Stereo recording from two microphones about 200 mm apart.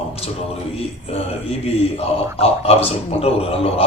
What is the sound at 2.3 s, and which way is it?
A man's voice, 30° left (ahead or behind).